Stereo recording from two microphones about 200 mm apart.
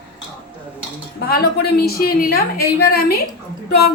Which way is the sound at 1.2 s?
50° left (ahead or behind).